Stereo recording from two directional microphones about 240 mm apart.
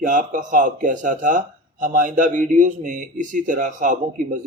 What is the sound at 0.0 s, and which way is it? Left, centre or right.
Speech, right.